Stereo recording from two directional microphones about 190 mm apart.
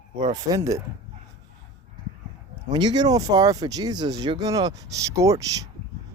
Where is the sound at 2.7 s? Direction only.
20° right (ahead or behind).